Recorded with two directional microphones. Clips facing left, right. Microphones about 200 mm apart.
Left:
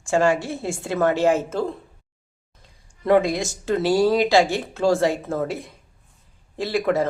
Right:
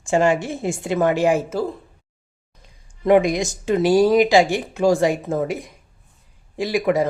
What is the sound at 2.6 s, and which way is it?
Speech, 15° right (ahead or behind).